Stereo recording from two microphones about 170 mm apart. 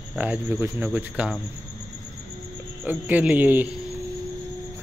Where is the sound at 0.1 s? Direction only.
10° right (ahead or behind).